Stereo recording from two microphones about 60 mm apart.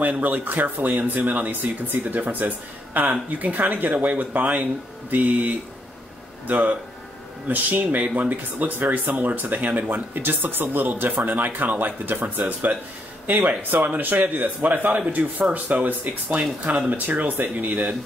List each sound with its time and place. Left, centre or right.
0.0 s speech: right